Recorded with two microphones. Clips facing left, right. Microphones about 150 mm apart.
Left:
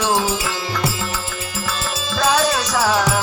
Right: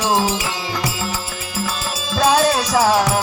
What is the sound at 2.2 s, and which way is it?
Music, 30° right (ahead or behind).